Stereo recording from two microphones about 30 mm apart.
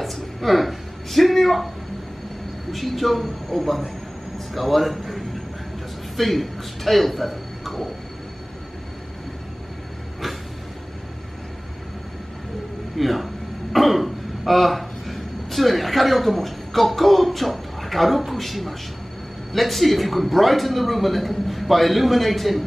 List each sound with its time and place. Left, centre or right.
0.0 s a sound: centre
1.4 s a man's voice: centre
2.7 s a man's voice: centre
12.9 s a man's voice: centre